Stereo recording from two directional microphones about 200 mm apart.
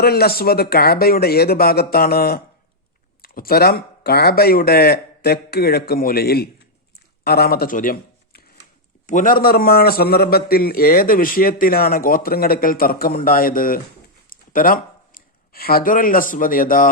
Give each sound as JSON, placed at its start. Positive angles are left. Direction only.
{"t": 0.0, "sound": "a man's voice", "side_deg": 50}